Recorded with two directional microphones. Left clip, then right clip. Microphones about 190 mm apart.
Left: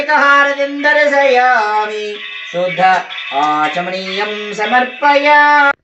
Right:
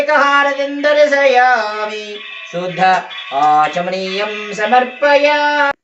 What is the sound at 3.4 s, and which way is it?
Female singing, 50° right (ahead or behind).